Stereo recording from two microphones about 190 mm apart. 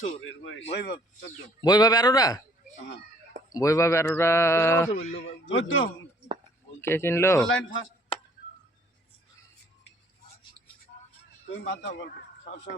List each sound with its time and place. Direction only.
0.3 s a man's voice: 85° left
0.9 s speech: 20° left (ahead or behind)
3.5 s speech: 15° left (ahead or behind)
5.5 s a man's voice: 90° left
6.8 s speech: 10° left (ahead or behind)
7.4 s a man's voice: 90° left
11.6 s speech: 70° left (ahead or behind)